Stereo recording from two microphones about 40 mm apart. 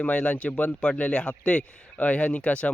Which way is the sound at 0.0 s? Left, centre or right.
Left.